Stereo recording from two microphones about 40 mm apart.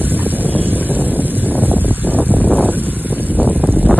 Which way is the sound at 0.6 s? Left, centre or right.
Right.